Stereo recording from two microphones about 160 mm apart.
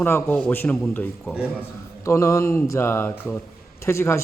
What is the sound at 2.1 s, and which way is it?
A man's voice, 20° left (ahead or behind).